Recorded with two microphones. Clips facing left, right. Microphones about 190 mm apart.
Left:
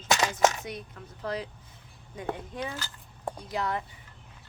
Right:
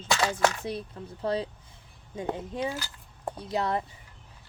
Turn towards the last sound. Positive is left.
turn(degrees=-30)  # may be behind; listen again after turning